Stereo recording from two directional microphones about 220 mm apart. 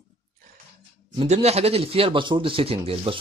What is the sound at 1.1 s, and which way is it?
Speech, 30° right (ahead or behind).